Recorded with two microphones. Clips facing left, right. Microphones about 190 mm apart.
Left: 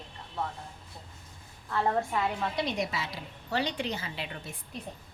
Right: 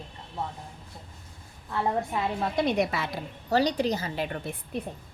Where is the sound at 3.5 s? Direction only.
40° right (ahead or behind); by 4.8 s 55° right (ahead or behind).